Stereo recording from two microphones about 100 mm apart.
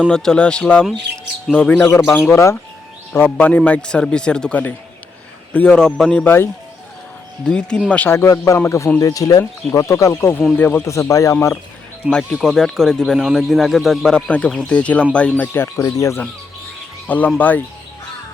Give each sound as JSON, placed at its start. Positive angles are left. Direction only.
{"t": 0.1, "sound": "speech", "side_deg": 5}
{"t": 2.3, "sound": "speech", "side_deg": 30}
{"t": 3.1, "sound": "speech", "side_deg": 20}
{"t": 6.2, "sound": "speech", "side_deg": 25}
{"t": 7.4, "sound": "speech", "side_deg": 10}
{"t": 8.1, "sound": "speech", "side_deg": 30}
{"t": 9.0, "sound": "speech", "side_deg": 40}
{"t": 10.8, "sound": "speech", "side_deg": 30}
{"t": 12.1, "sound": "speech", "side_deg": 5}
{"t": 15.5, "sound": "speech", "side_deg": 25}
{"t": 15.8, "sound": "speech", "side_deg": 35}
{"t": 17.1, "sound": "speech", "side_deg": 15}